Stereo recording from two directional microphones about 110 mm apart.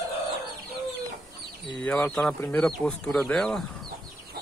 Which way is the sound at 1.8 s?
15° left (ahead or behind).